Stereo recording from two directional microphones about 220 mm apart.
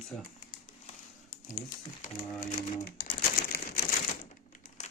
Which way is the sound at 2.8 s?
45° left (ahead or behind).